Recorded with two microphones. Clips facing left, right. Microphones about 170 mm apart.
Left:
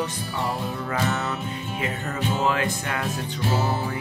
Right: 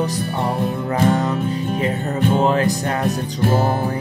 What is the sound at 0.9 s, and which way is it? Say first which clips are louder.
Music: right 8 dB; 45° right (ahead or behind).